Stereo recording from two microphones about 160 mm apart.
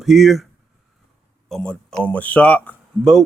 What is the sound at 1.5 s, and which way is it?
Speech, 5° left (ahead or behind).